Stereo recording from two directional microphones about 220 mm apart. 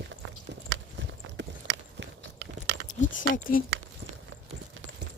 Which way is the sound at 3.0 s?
35° left (ahead or behind).